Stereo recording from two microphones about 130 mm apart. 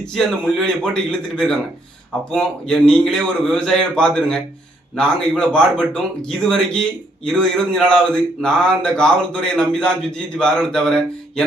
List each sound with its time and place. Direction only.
0.0 s a man's voice: 5° left (ahead or behind)